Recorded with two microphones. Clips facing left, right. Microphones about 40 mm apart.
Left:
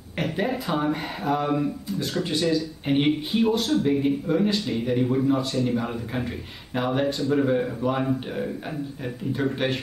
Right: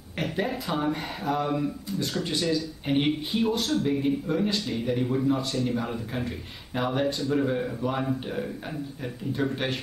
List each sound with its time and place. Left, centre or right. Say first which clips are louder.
0.2 s speech: left 3 dB; centre